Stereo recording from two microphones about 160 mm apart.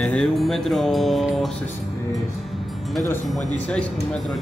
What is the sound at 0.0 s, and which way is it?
Mantra, 5° left (ahead or behind).